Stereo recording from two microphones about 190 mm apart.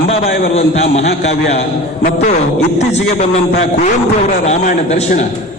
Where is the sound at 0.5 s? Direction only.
35° left (ahead or behind).